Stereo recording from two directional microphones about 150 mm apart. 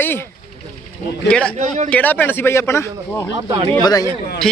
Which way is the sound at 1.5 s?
55° right (ahead or behind).